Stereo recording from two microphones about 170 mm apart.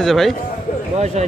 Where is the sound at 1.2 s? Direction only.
40° right (ahead or behind).